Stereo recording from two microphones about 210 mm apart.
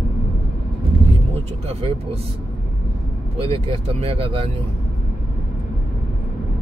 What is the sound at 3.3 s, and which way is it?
Speech, 25° right (ahead or behind).